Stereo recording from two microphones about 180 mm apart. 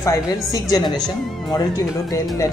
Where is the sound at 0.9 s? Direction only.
5° left (ahead or behind).